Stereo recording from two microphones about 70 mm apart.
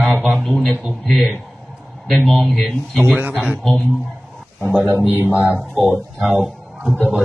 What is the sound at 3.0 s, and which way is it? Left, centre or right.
Speech, right.